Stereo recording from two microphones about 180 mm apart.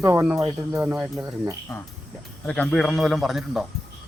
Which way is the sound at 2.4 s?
5° left (ahead or behind).